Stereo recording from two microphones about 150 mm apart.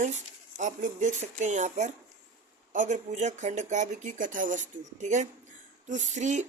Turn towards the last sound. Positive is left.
turn(degrees=-50)  # may be behind; listen again after turning